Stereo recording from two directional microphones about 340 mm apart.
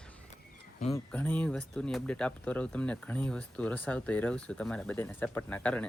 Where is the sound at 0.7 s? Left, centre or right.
Centre.